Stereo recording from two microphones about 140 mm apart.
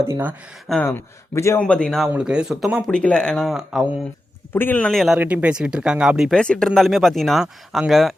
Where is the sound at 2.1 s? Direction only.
5° right (ahead or behind).